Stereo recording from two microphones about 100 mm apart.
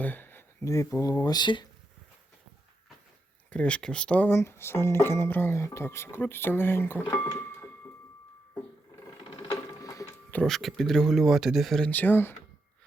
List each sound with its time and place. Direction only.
0.0 s a sound: 20° left (ahead or behind)
0.7 s speech: 30° left (ahead or behind); by 1.6 s 50° left (ahead or behind)
3.5 s speech: 15° left (ahead or behind)
4.3 s speech: 25° left (ahead or behind)
9.8 s tick-tock: 35° left (ahead or behind)
10.4 s speech: centre (ahead or behind)
11.9 s speech: 20° left (ahead or behind)